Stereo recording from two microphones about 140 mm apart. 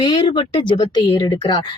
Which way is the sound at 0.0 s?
35° left (ahead or behind).